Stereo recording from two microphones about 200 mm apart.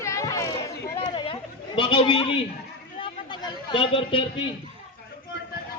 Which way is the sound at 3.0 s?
20° left (ahead or behind).